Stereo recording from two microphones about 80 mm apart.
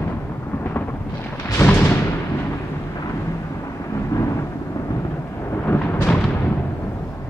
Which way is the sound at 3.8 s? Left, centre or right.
Left.